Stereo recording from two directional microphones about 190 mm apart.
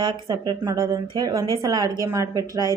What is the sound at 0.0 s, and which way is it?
Speech, 20° right (ahead or behind).